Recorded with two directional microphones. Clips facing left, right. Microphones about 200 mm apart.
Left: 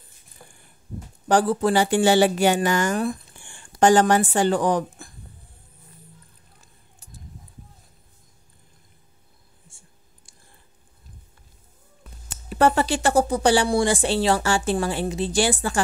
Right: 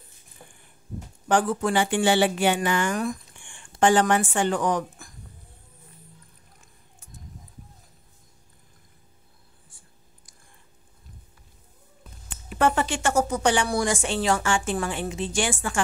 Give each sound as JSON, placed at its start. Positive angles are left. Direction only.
{"t": 0.4, "sound": "a sound", "side_deg": -20}
{"t": 1.3, "sound": "speech", "side_deg": 35}
{"t": 9.7, "sound": "clicking", "side_deg": 25}
{"t": 12.3, "sound": "speech", "side_deg": 35}